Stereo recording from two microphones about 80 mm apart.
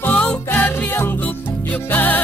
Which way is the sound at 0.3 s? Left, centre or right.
Centre.